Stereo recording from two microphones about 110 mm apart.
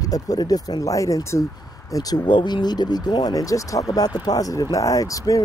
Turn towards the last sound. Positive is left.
turn(degrees=30)  # may be behind; listen again after turning